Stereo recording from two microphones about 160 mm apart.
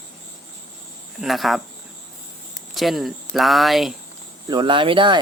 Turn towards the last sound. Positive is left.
turn(degrees=-30)  # may be behind; listen again after turning